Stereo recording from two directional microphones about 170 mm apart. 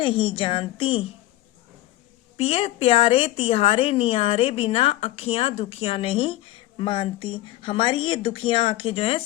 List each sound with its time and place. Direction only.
0.0 s speech: 30° left (ahead or behind)
2.4 s speech: 35° left (ahead or behind)